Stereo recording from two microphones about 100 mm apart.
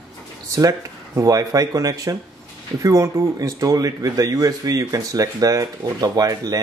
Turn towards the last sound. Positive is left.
turn(degrees=-35)  # may be behind; listen again after turning